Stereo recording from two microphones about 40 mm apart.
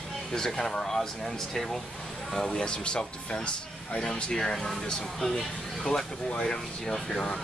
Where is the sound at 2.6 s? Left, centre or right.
Left; by 5.3 s centre.